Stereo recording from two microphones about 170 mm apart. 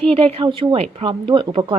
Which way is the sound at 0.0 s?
35° right (ahead or behind).